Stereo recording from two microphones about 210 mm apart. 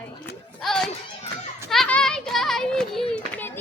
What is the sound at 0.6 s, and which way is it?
Music, centre (ahead or behind).